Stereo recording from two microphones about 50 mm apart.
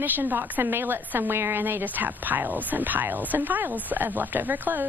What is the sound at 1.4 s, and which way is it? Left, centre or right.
Speech, right.